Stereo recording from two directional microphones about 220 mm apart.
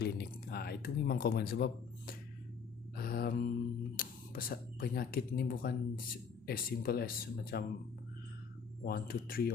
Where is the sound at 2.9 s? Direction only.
40° left (ahead or behind).